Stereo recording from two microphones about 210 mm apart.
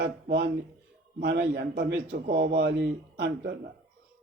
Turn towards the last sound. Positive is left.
turn(degrees=-50)  # may be behind; listen again after turning